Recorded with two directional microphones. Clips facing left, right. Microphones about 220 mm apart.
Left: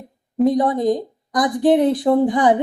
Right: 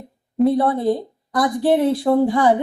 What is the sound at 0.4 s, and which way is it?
Speech, 15° left (ahead or behind).